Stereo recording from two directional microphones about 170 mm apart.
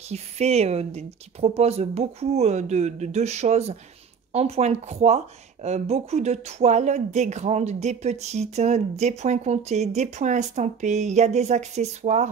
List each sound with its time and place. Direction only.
0.1 s speech: 40° right (ahead or behind)